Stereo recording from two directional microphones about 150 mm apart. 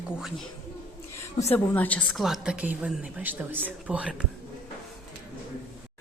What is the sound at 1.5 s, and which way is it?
Speech, 10° left (ahead or behind).